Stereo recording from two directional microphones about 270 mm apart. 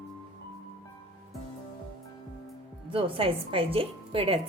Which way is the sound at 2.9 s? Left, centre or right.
Centre.